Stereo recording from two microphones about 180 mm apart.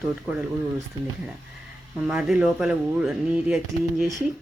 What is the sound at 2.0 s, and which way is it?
Speech, 5° right (ahead or behind).